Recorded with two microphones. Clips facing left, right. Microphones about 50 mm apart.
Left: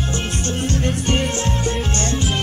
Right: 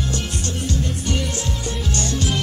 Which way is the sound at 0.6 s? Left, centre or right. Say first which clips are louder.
Left 4 dB; left.